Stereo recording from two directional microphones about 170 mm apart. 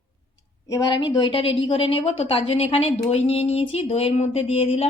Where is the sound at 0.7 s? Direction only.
20° left (ahead or behind).